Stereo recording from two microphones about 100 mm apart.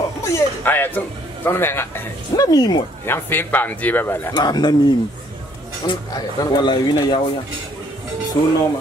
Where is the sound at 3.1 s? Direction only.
20° left (ahead or behind).